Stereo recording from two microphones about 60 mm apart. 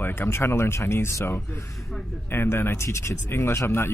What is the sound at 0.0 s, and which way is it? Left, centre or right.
Speech, left.